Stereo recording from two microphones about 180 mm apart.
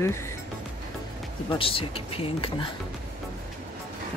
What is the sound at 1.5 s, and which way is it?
Speech, 30° left (ahead or behind).